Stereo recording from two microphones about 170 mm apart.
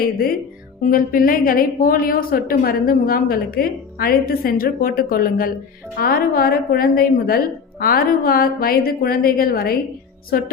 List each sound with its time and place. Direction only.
0.0 s a woman's voice: 60° left (ahead or behind)